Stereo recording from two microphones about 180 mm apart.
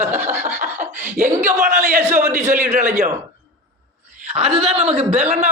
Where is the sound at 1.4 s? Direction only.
40° right (ahead or behind).